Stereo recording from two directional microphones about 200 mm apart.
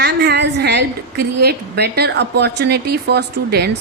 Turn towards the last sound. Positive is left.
turn(degrees=-55)  # may be behind; listen again after turning